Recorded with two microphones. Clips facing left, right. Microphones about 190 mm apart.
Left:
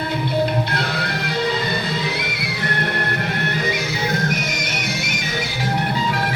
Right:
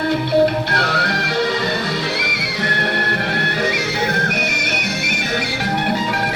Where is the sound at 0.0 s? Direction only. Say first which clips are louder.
Right 6 dB; 70° right (ahead or behind).